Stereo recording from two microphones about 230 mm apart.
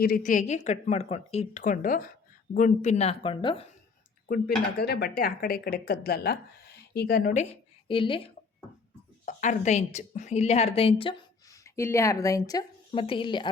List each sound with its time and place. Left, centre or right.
0.0 s speech: left
4.3 s speech: left
7.9 s speech: left
9.2 s a woman's voice: left